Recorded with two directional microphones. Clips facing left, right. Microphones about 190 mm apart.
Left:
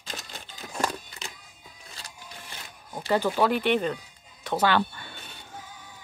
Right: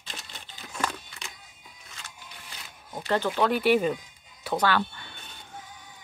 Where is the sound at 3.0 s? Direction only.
10° left (ahead or behind).